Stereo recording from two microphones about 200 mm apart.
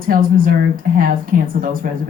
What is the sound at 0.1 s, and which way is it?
Speech, 45° right (ahead or behind).